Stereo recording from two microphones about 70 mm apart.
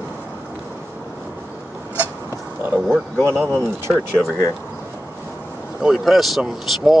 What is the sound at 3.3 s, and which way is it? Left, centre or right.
Speech, right.